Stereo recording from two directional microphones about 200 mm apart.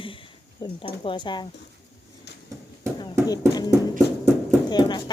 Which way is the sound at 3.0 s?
20° left (ahead or behind).